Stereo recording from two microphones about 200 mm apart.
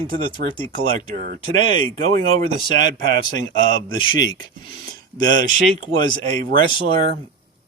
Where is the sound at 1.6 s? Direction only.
25° left (ahead or behind).